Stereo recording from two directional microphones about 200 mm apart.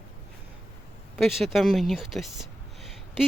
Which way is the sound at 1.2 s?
Centre (ahead or behind).